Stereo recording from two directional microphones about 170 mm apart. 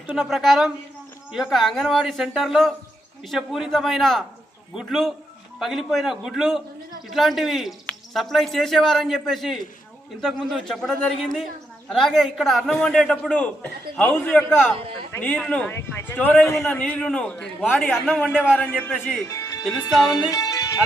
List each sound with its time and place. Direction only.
0.1 s a man's voice: centre (ahead or behind)
18.6 s a man's voice: 10° left (ahead or behind)
18.9 s speech: centre (ahead or behind)
19.3 s music: 20° left (ahead or behind)